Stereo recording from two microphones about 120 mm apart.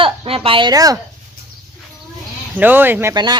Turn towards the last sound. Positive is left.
turn(degrees=-35)  # may be behind; listen again after turning